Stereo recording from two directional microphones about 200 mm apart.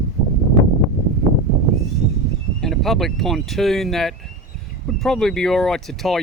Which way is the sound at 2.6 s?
Centre (ahead or behind).